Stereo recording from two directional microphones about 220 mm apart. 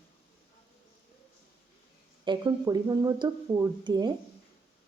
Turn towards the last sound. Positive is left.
turn(degrees=-20)  # may be behind; listen again after turning